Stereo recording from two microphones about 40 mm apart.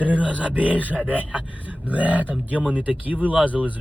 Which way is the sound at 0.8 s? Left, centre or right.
Left.